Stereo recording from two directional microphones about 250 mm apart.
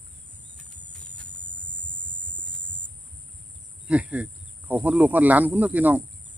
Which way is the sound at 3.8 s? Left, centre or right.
Centre.